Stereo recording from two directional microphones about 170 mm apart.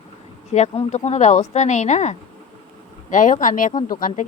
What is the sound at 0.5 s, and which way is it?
A woman's voice, 40° left (ahead or behind).